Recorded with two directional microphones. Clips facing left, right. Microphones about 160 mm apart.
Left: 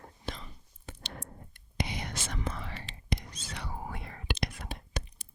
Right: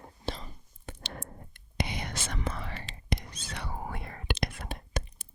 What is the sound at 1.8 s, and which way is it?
Whispering, 65° right (ahead or behind).